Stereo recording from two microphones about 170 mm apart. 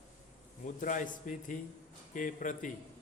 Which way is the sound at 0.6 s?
50° left (ahead or behind).